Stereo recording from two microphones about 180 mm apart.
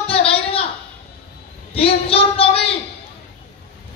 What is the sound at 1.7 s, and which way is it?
A man's voice, 30° left (ahead or behind).